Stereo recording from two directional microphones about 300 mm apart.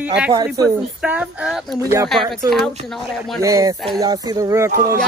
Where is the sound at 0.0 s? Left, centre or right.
Centre.